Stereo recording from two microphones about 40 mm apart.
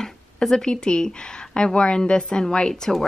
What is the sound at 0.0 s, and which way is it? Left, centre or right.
Speech, centre.